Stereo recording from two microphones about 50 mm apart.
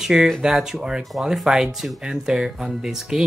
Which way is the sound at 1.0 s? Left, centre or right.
Centre.